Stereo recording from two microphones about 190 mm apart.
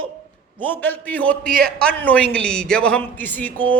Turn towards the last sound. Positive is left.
turn(degrees=10)  # may be behind; listen again after turning